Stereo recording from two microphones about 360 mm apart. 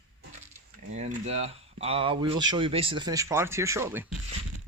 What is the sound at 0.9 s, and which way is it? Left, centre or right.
Speech, centre.